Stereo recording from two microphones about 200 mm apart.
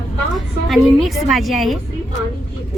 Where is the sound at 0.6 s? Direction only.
Centre (ahead or behind).